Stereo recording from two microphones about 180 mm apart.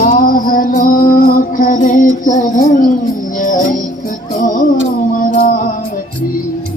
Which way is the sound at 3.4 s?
45° left (ahead or behind).